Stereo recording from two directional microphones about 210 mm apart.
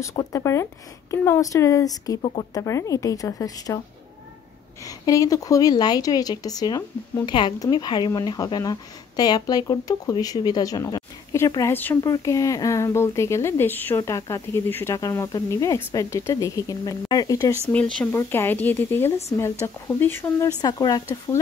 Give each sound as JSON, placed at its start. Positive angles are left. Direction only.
{"t": 0.0, "sound": "a woman's voice", "side_deg": 15}
{"t": 4.8, "sound": "a woman's voice", "side_deg": 15}